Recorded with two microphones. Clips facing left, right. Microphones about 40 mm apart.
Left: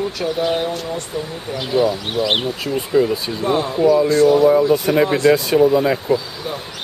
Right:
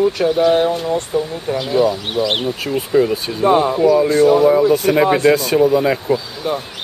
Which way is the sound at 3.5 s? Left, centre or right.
Right.